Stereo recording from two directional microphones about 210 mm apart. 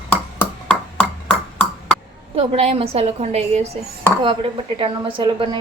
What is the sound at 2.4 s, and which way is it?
A woman's voice, 30° right (ahead or behind).